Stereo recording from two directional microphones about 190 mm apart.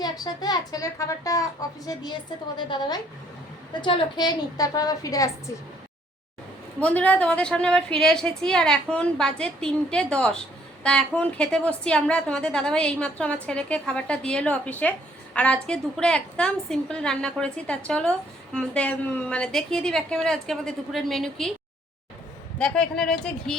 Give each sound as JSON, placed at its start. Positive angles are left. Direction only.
{"t": 0.0, "sound": "a child's voice", "side_deg": 20}
{"t": 6.8, "sound": "a woman's voice", "side_deg": 10}
{"t": 22.5, "sound": "a woman's voice", "side_deg": 5}